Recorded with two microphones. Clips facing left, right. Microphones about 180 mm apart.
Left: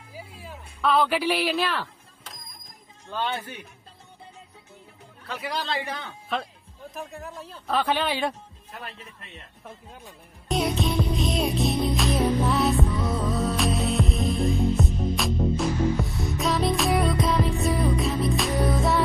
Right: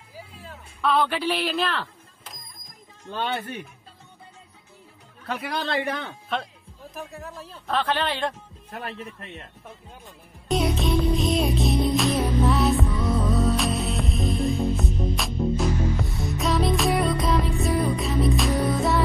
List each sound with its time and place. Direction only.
0.4 s a woman's voice: 5° left (ahead or behind)
5.2 s speech: 55° right (ahead or behind)
6.2 s speech: centre (ahead or behind)
8.8 s speech: 55° right (ahead or behind)
10.5 s music: centre (ahead or behind)